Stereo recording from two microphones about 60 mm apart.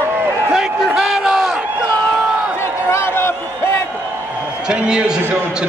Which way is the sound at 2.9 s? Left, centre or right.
Left.